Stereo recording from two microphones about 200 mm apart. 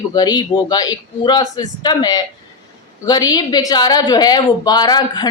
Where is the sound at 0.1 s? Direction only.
20° left (ahead or behind).